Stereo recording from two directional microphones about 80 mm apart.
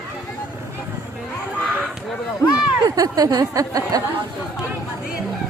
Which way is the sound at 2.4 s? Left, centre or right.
Left.